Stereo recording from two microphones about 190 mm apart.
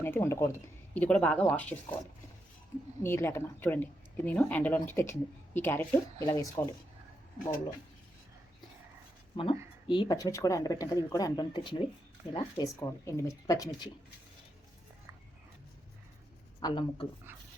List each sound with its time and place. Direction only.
0.0 s speech: 10° left (ahead or behind)
3.0 s speech: 10° left (ahead or behind)
9.3 s speech: 25° left (ahead or behind)
16.6 s speech: 20° left (ahead or behind)